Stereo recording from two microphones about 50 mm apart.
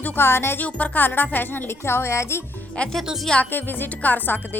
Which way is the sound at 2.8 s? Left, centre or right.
Left.